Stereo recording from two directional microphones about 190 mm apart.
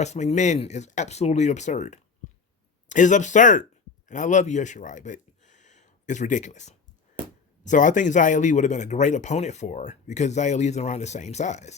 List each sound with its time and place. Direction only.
0.0 s speech: 35° left (ahead or behind)